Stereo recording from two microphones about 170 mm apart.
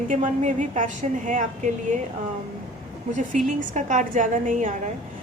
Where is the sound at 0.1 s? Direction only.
45° right (ahead or behind).